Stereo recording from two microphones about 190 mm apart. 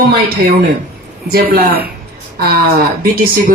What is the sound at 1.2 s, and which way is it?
A woman's voice, 55° right (ahead or behind).